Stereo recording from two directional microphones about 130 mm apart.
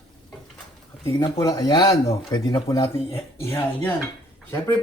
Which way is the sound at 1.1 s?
30° left (ahead or behind).